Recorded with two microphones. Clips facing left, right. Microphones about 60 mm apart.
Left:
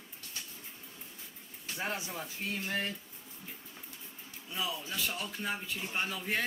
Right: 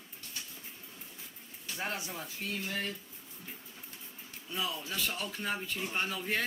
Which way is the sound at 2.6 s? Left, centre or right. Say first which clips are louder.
Left 3 dB; left.